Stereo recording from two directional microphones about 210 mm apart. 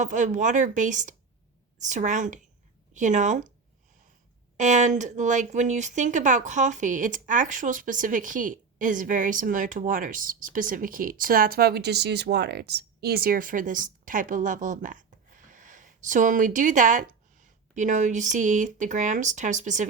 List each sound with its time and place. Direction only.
0.0 s speech: 35° right (ahead or behind)
4.5 s speech: 35° right (ahead or behind)